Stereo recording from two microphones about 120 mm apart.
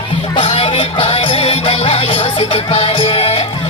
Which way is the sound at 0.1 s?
50° left (ahead or behind).